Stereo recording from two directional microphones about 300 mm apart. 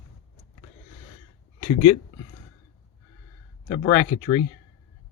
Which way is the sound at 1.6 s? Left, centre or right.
Centre.